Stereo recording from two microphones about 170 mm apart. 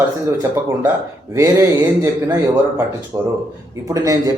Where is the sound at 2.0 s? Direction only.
15° right (ahead or behind).